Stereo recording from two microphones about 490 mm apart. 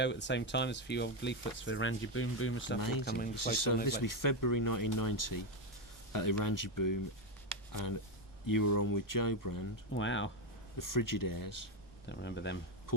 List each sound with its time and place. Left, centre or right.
0.0 s speech: left
3.3 s speech: left
8.4 s speech: left
9.9 s speech: left
10.8 s speech: left
12.0 s speech: left